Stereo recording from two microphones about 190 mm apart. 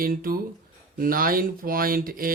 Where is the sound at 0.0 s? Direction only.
50° right (ahead or behind).